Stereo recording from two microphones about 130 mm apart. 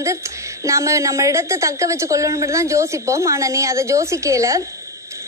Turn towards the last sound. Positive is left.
turn(degrees=-25)  # may be behind; listen again after turning